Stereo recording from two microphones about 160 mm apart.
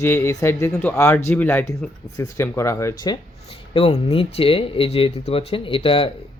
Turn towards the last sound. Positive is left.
turn(degrees=35)  # may be behind; listen again after turning